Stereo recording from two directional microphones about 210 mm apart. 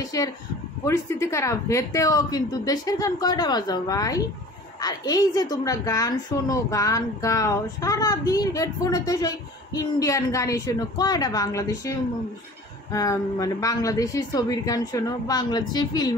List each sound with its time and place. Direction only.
0.0 s a woman's voice: 15° left (ahead or behind)
12.9 s a woman's voice: 15° left (ahead or behind)